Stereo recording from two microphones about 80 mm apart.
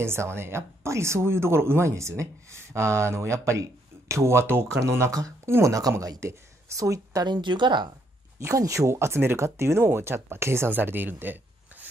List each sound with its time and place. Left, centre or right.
0.0 s a woman's voice: right
7.2 s speech: right
8.4 s speech: right